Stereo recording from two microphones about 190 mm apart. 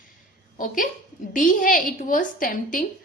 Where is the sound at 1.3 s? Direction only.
45° left (ahead or behind).